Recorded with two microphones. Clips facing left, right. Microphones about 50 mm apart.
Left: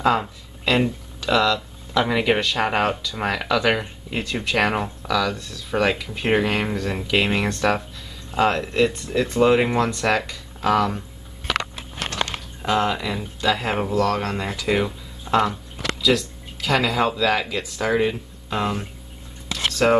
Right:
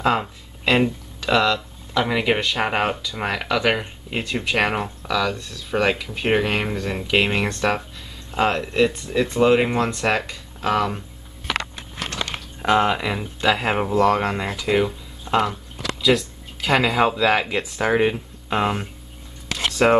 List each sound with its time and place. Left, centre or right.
0.0 s speech: centre
2.0 s speech: centre
4.1 s speech: centre
12.6 s speech: centre